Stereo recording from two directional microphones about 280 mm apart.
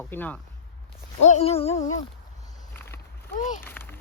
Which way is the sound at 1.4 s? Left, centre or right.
Left.